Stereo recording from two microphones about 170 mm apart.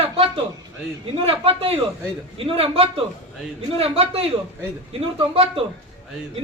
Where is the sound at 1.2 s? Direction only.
35° right (ahead or behind).